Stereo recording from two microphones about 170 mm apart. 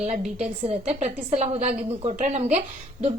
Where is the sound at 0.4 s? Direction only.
35° right (ahead or behind).